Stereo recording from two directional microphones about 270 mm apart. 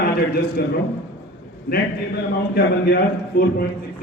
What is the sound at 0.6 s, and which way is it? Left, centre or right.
Speech, left.